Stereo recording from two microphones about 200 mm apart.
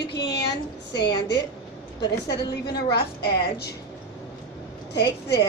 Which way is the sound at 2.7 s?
55° left (ahead or behind).